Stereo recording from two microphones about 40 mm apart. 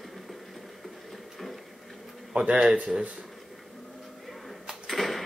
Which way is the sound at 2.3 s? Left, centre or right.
Right.